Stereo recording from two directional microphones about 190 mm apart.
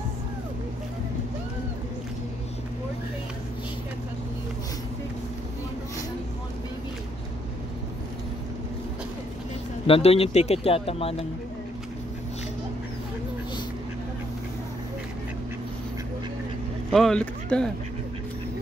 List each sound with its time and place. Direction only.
9.8 s speech: 30° left (ahead or behind)
16.9 s speech: 5° left (ahead or behind)